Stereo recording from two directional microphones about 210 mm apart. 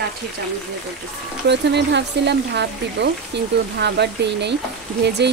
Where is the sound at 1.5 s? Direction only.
55° right (ahead or behind).